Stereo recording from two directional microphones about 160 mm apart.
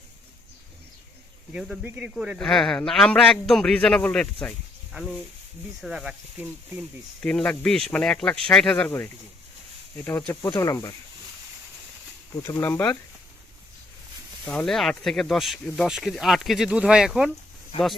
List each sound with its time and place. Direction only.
1.5 s a man's voice: centre (ahead or behind)
7.2 s a man's voice: 5° left (ahead or behind); by 10.9 s 20° left (ahead or behind)
12.4 s speech: 15° left (ahead or behind)
14.4 s a man's voice: 5° left (ahead or behind)